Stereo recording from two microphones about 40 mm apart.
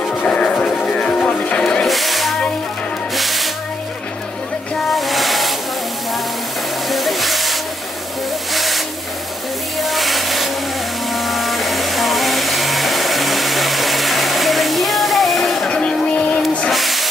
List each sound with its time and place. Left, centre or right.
0.3 s music: left
1.6 s music: left
1.9 s a sound: centre
3.2 s music: centre
4.9 s music: centre
6.9 s music: centre
8.5 s vehicle: centre
9.8 s music: centre
11.1 s vehicle: centre
15.7 s vehicle: left
16.2 s a sound: left
16.7 s a sound: centre